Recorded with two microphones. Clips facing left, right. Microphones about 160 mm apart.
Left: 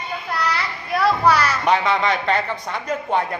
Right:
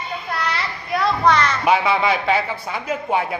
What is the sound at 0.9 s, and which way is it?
Speech, 5° left (ahead or behind).